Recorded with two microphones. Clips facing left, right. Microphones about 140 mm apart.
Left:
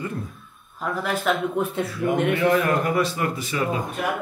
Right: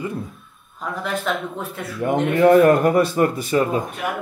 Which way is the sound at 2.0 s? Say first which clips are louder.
Right 6 dB; 40° right (ahead or behind).